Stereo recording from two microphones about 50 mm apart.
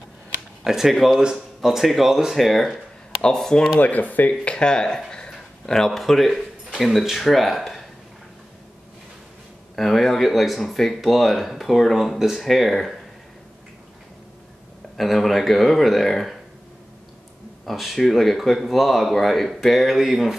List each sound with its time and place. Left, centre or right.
0.7 s speech: centre
3.8 s speech: left
4.3 s speech: left; by 7.8 s centre
9.8 s speech: centre
15.0 s speech: centre
17.6 s speech: centre